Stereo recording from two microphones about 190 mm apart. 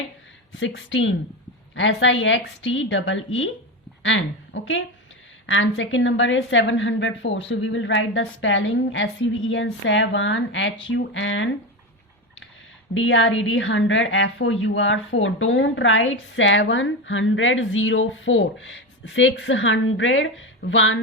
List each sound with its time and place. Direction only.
0.5 s a woman's voice: 85° left
12.9 s a woman's voice: 80° left